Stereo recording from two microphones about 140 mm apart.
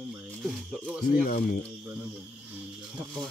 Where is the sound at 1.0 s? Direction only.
90° left.